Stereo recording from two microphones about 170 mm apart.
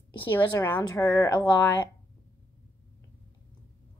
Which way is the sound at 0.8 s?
20° left (ahead or behind).